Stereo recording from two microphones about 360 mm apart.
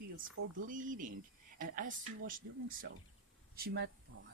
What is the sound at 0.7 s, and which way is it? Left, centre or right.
Speech, right.